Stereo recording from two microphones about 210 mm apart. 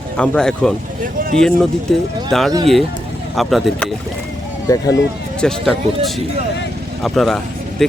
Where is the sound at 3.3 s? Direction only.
Centre (ahead or behind).